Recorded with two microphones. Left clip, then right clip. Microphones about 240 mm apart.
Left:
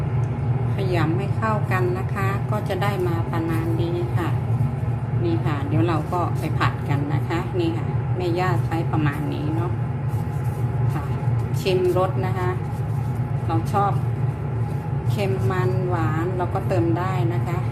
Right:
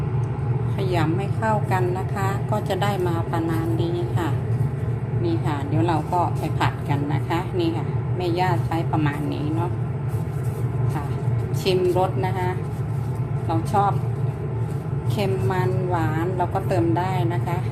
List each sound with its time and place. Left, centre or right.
0.8 s a woman's voice: centre
11.6 s a woman's voice: centre
15.2 s a woman's voice: centre